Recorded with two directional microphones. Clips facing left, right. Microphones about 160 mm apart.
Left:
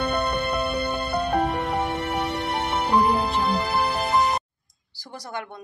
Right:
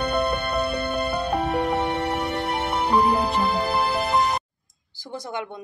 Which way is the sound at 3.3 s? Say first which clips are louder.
Right 1 dB; centre (ahead or behind).